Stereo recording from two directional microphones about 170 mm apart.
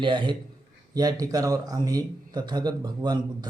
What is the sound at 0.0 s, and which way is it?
A man's voice, 30° right (ahead or behind).